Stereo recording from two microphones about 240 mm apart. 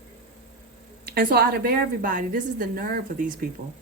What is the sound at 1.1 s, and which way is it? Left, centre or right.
A woman's voice, right.